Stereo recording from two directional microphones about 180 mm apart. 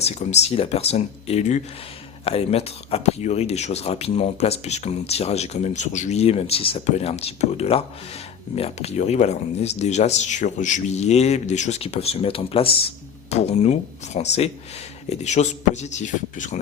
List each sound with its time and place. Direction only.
0.0 s speech: 40° left (ahead or behind)